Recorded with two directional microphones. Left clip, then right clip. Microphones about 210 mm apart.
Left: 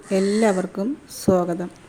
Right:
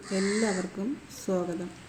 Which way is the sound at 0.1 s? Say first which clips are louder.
Left 9 dB; 45° left (ahead or behind).